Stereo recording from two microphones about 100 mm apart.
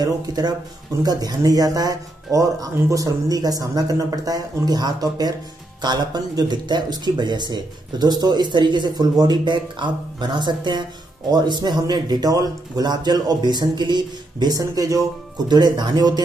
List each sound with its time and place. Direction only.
0.0 s speech: 40° right (ahead or behind)